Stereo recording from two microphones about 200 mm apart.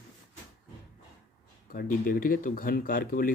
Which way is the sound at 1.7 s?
45° left (ahead or behind).